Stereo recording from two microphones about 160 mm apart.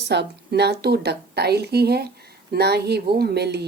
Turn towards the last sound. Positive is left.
turn(degrees=-90)